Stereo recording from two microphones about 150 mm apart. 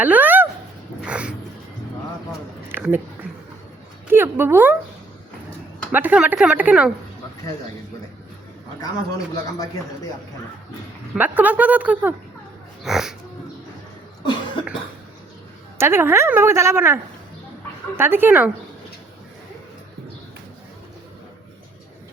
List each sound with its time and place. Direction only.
0.0 s speech: 10° right (ahead or behind)
1.0 s a sound: 10° right (ahead or behind)
2.7 s speech: 15° right (ahead or behind)
4.1 s a woman's voice: 15° right (ahead or behind)
5.9 s a woman's voice: 10° right (ahead or behind)
8.8 s a man's voice: 25° left (ahead or behind)
11.1 s a woman's voice: 10° right (ahead or behind)
15.8 s a woman's voice: 15° right (ahead or behind)